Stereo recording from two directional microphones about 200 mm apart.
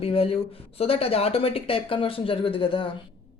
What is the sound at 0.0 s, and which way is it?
Speech, 30° left (ahead or behind).